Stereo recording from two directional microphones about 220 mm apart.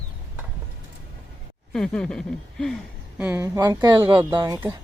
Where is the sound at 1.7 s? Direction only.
5° left (ahead or behind).